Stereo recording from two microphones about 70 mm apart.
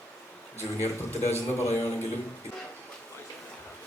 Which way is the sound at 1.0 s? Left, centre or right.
Left.